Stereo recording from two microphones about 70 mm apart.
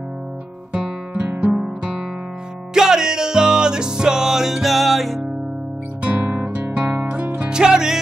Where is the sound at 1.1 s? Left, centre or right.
Right.